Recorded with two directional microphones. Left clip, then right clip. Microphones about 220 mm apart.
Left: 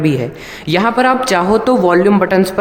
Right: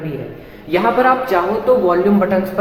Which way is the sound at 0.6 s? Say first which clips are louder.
Left 1 dB; 55° left (ahead or behind).